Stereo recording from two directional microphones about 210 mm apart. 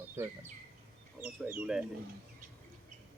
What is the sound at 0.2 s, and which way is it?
Speech, 10° right (ahead or behind).